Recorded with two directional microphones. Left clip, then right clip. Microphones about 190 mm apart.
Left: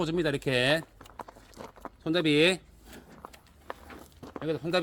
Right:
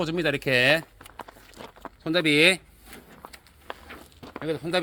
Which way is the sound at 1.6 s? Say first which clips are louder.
Right 2 dB; 20° right (ahead or behind).